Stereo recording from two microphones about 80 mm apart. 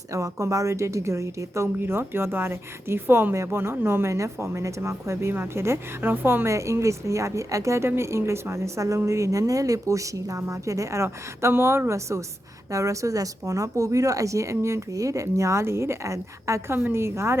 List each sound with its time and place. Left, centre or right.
0.1 s speech: right